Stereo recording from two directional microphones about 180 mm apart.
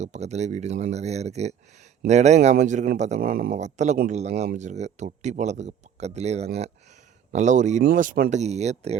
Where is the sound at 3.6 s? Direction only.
40° right (ahead or behind).